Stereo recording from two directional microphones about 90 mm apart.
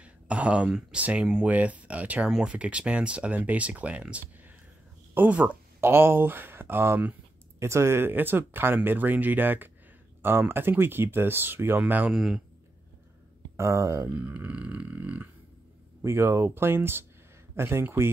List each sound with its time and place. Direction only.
0.0 s speech: 15° right (ahead or behind)
5.8 s speech: 25° right (ahead or behind)
7.5 s speech: 30° right (ahead or behind); by 12.1 s 15° right (ahead or behind)
12.1 s speech: centre (ahead or behind)
13.6 s speech: 35° right (ahead or behind)
14.1 s speech: 20° right (ahead or behind)
16.0 s speech: 30° right (ahead or behind)